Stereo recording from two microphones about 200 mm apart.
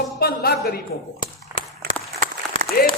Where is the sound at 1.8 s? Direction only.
50° right (ahead or behind).